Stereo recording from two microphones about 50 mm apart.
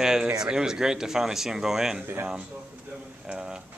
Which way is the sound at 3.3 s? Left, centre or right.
Centre.